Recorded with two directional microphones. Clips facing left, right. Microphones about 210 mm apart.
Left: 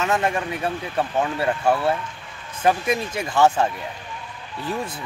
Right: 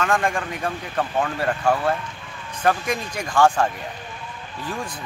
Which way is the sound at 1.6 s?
5° left (ahead or behind).